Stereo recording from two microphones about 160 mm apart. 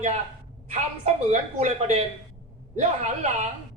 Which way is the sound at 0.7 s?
45° right (ahead or behind).